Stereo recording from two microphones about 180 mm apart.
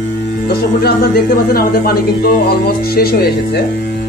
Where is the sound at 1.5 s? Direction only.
55° left (ahead or behind).